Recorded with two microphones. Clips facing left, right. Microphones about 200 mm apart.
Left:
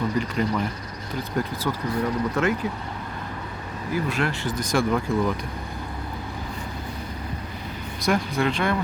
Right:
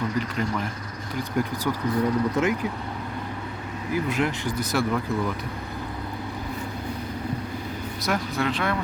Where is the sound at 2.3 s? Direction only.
15° right (ahead or behind).